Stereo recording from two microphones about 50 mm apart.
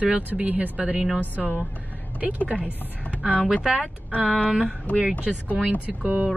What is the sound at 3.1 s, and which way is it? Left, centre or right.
Speech, right.